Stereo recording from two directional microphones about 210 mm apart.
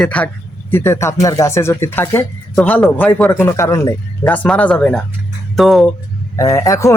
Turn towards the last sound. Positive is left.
turn(degrees=15)  # may be behind; listen again after turning